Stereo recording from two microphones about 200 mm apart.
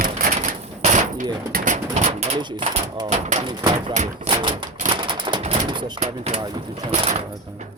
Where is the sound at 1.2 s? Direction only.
40° right (ahead or behind).